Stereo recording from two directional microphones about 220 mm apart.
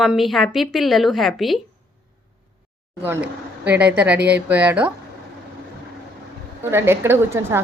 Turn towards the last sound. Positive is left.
turn(degrees=-10)  # may be behind; listen again after turning